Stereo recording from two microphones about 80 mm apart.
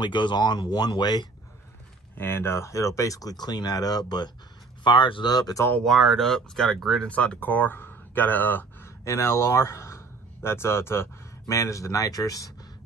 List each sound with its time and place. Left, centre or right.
0.0 s speech: left
2.1 s speech: left
4.8 s speech: left
5.3 s speech: left
5.9 s speech: centre; by 8.6 s left
8.8 s speech: left